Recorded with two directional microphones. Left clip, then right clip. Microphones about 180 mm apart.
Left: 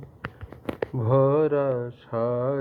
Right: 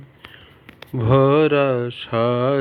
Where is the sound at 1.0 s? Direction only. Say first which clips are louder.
Right 5 dB; 50° right (ahead or behind).